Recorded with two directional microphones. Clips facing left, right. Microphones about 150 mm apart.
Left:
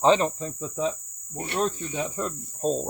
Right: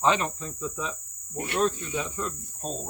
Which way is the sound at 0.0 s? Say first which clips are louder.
Left 5 dB; 35° left (ahead or behind).